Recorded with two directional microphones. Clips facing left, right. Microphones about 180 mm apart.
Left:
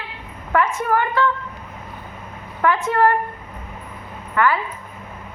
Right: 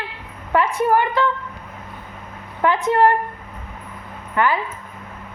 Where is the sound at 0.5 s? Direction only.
30° right (ahead or behind).